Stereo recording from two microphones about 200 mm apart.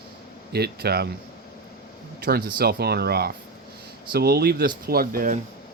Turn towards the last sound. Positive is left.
turn(degrees=-45)  # may be behind; listen again after turning